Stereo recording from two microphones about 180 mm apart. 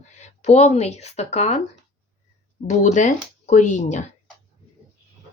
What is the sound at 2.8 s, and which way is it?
Speech, 40° left (ahead or behind).